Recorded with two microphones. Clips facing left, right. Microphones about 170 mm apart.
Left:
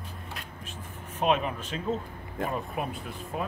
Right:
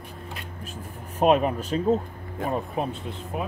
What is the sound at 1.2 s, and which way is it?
Speech, 40° right (ahead or behind).